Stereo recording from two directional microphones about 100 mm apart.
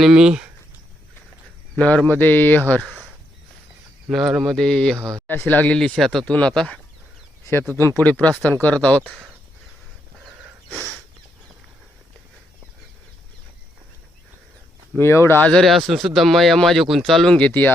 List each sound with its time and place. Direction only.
0.0 s speech: 5° right (ahead or behind)
1.7 s speech: 10° left (ahead or behind)
4.1 s speech: centre (ahead or behind)
4.9 s speech: 35° right (ahead or behind)
5.3 s speech: 20° left (ahead or behind)
7.7 s speech: 20° left (ahead or behind)
9.0 s speech: 15° right (ahead or behind)
14.9 s speech: 25° left (ahead or behind)
15.4 s speech: 5° left (ahead or behind)